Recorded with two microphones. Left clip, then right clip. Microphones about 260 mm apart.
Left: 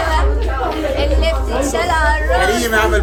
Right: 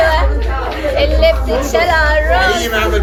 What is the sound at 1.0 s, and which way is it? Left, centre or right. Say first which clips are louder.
Speech: right 6 dB; centre.